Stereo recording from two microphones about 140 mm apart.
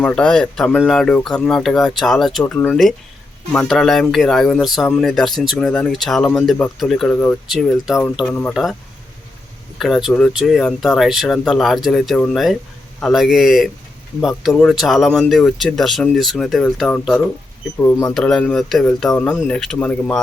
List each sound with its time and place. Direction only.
0.0 s speech: 10° left (ahead or behind)
9.7 s speech: centre (ahead or behind)
17.7 s speech: 20° left (ahead or behind)
18.1 s speech: 5° left (ahead or behind)